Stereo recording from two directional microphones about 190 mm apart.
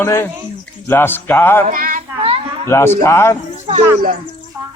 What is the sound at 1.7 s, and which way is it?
Child singing, 45° right (ahead or behind).